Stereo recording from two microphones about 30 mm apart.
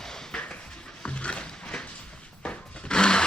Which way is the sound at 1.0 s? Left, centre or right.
Left.